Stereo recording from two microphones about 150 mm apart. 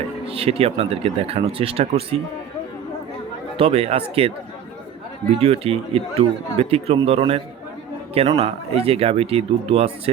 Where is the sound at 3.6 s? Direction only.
45° right (ahead or behind).